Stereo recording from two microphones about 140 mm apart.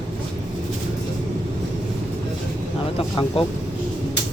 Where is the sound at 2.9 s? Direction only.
40° left (ahead or behind).